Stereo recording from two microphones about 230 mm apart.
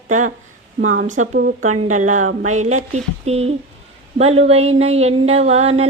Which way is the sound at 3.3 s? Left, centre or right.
Right.